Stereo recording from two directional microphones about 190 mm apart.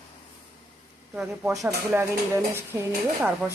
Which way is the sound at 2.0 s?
15° right (ahead or behind).